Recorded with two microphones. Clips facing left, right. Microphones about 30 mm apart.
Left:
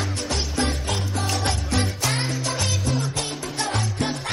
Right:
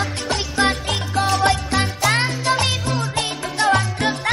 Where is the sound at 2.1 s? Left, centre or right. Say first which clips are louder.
Right 7 dB; right.